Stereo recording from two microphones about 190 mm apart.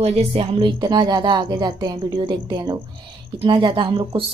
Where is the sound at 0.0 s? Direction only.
30° right (ahead or behind).